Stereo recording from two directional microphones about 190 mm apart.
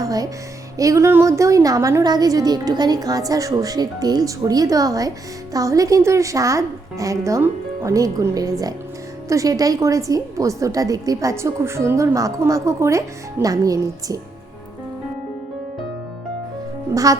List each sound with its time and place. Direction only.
0.0 s music: 20° right (ahead or behind)
0.8 s a woman's voice: 15° right (ahead or behind)
16.9 s a child's voice: 20° right (ahead or behind)